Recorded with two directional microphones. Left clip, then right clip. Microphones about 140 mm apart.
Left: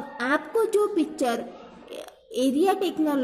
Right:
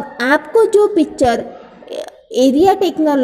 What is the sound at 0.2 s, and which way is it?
A woman's voice, 30° right (ahead or behind).